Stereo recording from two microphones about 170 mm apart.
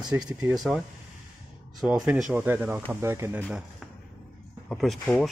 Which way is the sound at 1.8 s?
5° right (ahead or behind).